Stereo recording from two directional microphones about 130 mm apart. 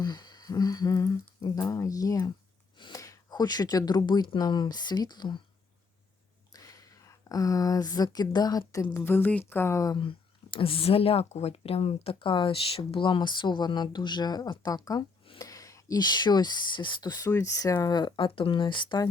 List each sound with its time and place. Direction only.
0.0 s humming: 30° left (ahead or behind)
1.4 s speech: 25° left (ahead or behind)
6.5 s speech: 25° left (ahead or behind)
10.0 s speech: 40° left (ahead or behind)